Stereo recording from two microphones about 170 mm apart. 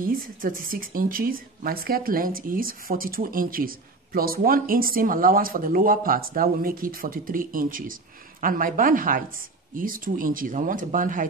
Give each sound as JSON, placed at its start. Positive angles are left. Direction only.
{"t": 0.0, "sound": "speech", "side_deg": -55}